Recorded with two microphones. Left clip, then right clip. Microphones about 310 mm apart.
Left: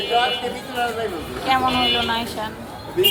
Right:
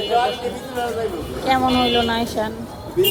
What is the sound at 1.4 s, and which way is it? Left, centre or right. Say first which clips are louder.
Speech: right 1 dB; centre.